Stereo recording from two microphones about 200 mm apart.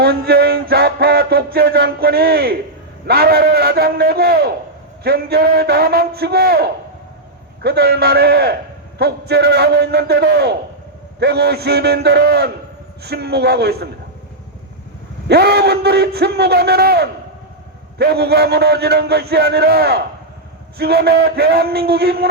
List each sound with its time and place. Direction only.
0.0 s music: 50° right (ahead or behind)
9.0 s a man's voice: 55° right (ahead or behind)
11.2 s music: 55° right (ahead or behind)
15.3 s music: 55° right (ahead or behind)